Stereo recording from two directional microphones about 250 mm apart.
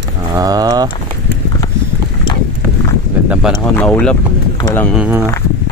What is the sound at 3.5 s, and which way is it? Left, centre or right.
Speech, centre.